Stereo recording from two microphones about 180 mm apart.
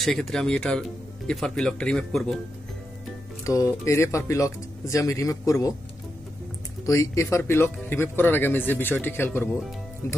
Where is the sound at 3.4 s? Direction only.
15° left (ahead or behind).